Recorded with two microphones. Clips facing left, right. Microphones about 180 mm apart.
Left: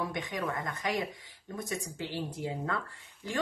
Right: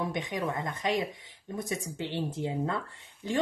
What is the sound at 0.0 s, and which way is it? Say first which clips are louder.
A woman's voice: right 3 dB; 20° right (ahead or behind).